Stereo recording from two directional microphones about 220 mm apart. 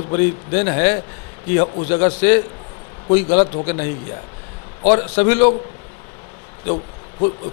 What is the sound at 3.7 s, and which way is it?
A man's voice, 15° left (ahead or behind).